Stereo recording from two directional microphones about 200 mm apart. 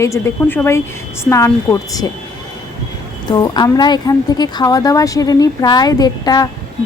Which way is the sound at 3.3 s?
20° left (ahead or behind).